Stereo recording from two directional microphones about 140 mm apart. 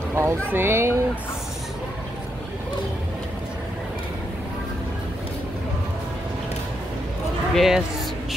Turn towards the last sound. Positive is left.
turn(degrees=0)  # may be behind; listen again after turning